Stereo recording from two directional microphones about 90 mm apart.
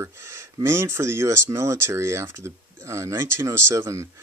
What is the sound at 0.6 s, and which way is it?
Speech, 30° right (ahead or behind).